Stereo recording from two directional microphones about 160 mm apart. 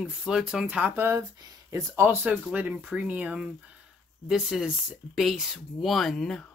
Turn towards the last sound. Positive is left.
turn(degrees=0)  # may be behind; listen again after turning